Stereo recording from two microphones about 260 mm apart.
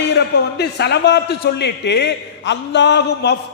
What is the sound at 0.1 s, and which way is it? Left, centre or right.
A man's voice, left.